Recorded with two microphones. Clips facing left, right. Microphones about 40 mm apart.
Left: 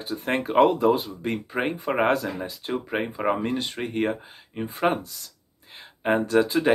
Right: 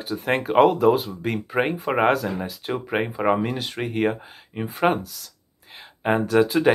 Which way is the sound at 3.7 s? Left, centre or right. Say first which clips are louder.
Right 3 dB; centre.